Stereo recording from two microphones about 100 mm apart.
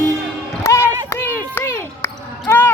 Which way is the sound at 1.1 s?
25° left (ahead or behind).